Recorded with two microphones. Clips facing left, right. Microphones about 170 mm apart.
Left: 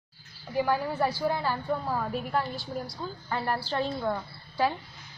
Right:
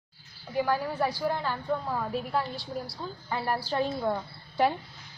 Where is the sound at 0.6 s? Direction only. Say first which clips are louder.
Left 1 dB; 5° left (ahead or behind).